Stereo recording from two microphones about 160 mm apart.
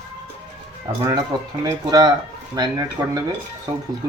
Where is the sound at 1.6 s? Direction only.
25° right (ahead or behind).